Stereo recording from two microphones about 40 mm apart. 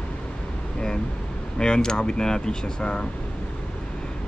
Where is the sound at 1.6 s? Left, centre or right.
Centre.